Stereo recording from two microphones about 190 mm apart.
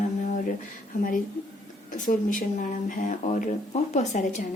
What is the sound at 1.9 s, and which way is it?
Speech, 45° left (ahead or behind).